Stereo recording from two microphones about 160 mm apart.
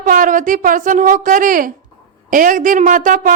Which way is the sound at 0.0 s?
55° right (ahead or behind).